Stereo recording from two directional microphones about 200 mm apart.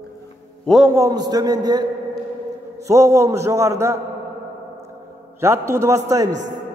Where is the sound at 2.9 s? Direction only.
15° right (ahead or behind).